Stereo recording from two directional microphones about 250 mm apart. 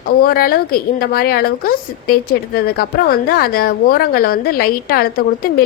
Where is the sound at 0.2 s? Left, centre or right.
Left.